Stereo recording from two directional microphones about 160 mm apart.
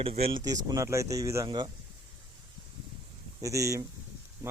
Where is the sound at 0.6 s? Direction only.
20° right (ahead or behind).